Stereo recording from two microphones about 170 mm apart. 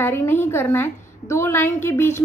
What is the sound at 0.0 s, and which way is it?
A woman's voice, 10° left (ahead or behind).